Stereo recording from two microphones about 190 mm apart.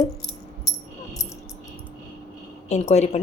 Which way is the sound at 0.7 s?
20° left (ahead or behind).